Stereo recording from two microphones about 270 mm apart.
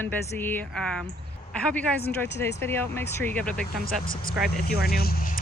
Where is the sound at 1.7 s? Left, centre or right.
Centre.